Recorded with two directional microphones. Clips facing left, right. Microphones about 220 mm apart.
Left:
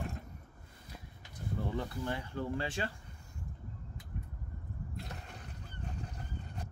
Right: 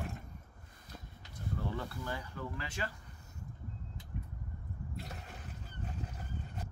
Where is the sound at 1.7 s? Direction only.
25° left (ahead or behind).